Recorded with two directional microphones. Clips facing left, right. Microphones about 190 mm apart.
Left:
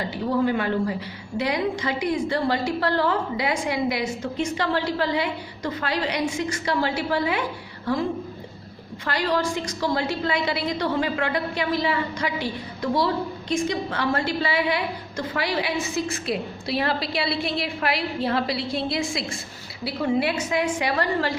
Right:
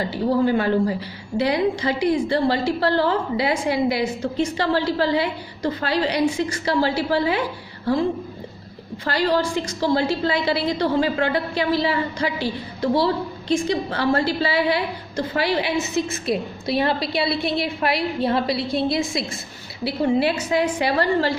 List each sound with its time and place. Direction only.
0.1 s a woman's voice: 35° right (ahead or behind)
9.0 s a woman's voice: 30° right (ahead or behind)